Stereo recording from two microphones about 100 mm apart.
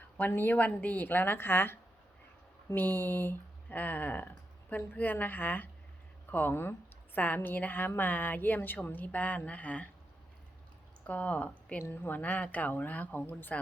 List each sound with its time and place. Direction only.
0.2 s a woman's voice: 20° left (ahead or behind)
11.0 s a woman's voice: 15° left (ahead or behind)